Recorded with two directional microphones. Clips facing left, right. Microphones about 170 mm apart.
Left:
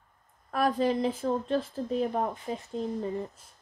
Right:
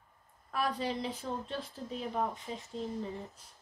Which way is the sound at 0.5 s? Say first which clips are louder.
Left 8 dB; 45° left (ahead or behind).